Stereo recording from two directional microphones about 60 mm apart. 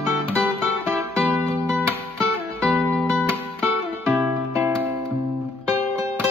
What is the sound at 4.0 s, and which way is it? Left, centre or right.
Music, right.